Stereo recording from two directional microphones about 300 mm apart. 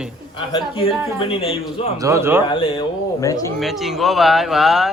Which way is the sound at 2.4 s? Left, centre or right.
Centre.